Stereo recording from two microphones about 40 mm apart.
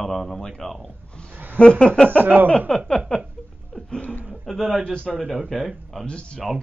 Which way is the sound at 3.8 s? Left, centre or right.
Centre.